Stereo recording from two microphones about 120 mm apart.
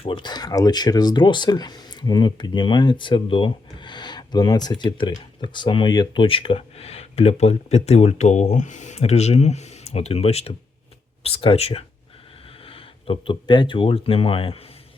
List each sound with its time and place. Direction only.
0.0 s speech: 40° left (ahead or behind)